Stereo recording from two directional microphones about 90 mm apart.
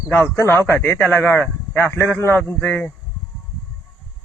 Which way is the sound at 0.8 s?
20° left (ahead or behind).